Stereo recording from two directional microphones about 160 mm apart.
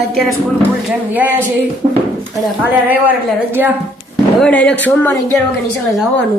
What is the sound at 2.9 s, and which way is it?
Speech, 10° right (ahead or behind).